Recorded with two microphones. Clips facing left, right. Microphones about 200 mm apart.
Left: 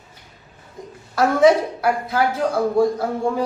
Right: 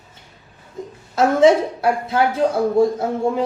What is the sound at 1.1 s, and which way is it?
Speech, 25° right (ahead or behind).